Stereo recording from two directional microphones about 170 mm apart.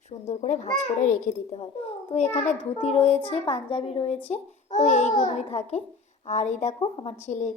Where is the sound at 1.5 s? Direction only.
35° left (ahead or behind).